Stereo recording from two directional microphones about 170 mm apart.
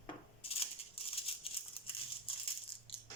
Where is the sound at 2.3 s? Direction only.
35° left (ahead or behind).